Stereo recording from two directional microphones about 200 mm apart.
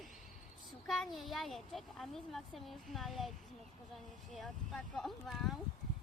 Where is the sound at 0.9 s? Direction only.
Centre (ahead or behind).